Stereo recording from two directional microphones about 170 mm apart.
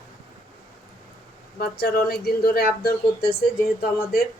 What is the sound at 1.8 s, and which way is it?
Speech, 65° left (ahead or behind).